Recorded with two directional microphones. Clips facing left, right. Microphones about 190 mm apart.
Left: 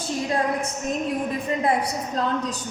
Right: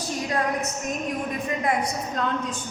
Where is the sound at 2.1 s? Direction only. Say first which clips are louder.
Left 3 dB; 35° left (ahead or behind).